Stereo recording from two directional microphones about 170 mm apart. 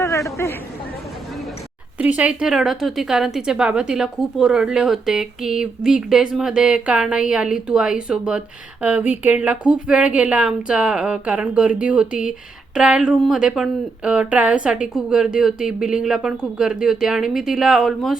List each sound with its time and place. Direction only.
0.0 s chatter: 20° left (ahead or behind)
2.0 s a woman's voice: 10° right (ahead or behind)